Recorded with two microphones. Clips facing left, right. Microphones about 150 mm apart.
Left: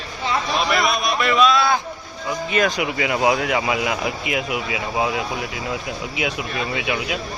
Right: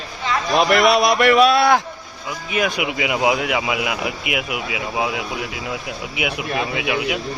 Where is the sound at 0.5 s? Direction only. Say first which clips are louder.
Right 8 dB; 65° right (ahead or behind).